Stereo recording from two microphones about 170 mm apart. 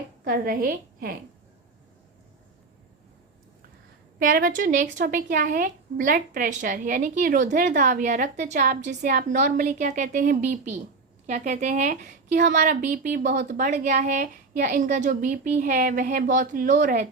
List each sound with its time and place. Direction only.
0.3 s a woman's voice: 60° right (ahead or behind)
4.2 s a woman's voice: 55° right (ahead or behind)